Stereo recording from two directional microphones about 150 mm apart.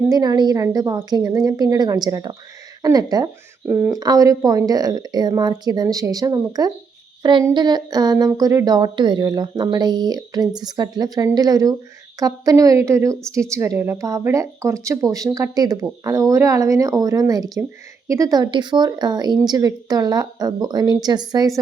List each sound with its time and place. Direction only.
0.1 s a woman's voice: 25° right (ahead or behind)
3.7 s a woman's voice: 15° right (ahead or behind)
7.2 s a sound: 30° right (ahead or behind)
7.5 s a woman's voice: 30° right (ahead or behind)